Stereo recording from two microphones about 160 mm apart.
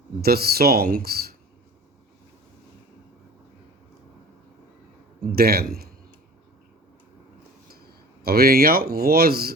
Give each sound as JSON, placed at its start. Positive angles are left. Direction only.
{"t": 0.2, "sound": "speech", "side_deg": -75}
{"t": 5.3, "sound": "speech", "side_deg": -75}
{"t": 8.2, "sound": "speech", "side_deg": -75}